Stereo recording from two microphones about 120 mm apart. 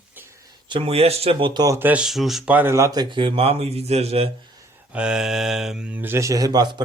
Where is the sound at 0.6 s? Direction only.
45° right (ahead or behind).